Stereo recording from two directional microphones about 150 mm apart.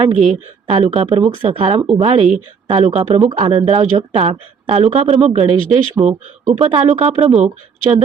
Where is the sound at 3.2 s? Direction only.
35° right (ahead or behind).